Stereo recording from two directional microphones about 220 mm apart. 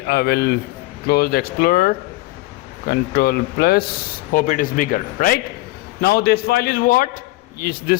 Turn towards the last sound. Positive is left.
turn(degrees=45)  # may be behind; listen again after turning